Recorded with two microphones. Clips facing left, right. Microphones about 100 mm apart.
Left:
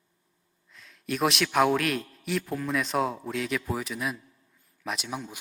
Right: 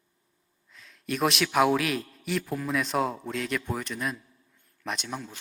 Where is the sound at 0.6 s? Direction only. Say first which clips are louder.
Even; centre (ahead or behind).